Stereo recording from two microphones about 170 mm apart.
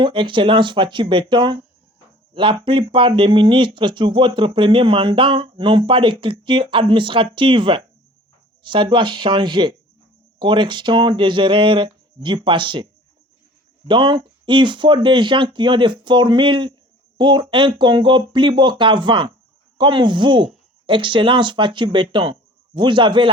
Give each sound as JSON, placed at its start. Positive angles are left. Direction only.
{"t": 0.0, "sound": "speech", "side_deg": -30}